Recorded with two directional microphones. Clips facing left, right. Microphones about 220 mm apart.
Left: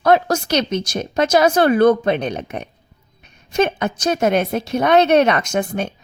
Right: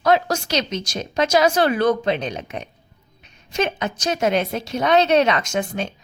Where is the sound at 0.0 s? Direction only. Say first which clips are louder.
Left 3 dB; 55° left (ahead or behind).